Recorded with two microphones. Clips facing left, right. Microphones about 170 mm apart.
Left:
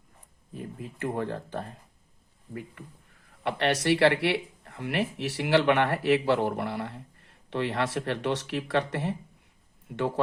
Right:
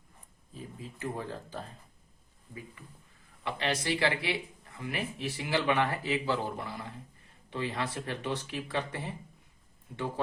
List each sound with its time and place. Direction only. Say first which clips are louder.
0.5 s speech: left 5 dB; 60° left (ahead or behind)